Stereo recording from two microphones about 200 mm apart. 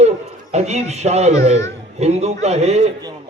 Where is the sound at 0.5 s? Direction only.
35° right (ahead or behind).